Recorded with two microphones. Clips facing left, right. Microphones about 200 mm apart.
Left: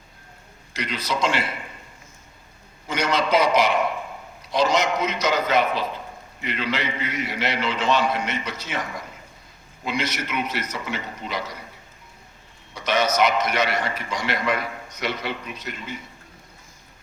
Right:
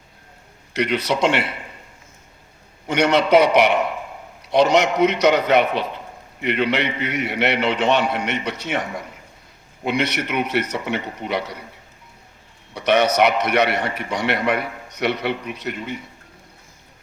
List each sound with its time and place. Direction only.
0.7 s a man's voice: 65° right (ahead or behind)
2.8 s a man's voice: 65° right (ahead or behind)
12.7 s a man's voice: 65° right (ahead or behind)